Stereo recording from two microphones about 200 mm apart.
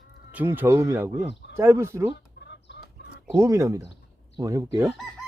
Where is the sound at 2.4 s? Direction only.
55° left (ahead or behind).